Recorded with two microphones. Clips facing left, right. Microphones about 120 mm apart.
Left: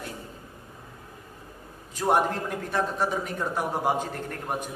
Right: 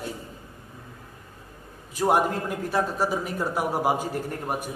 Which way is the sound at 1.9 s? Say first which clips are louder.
Right 1 dB; 5° right (ahead or behind).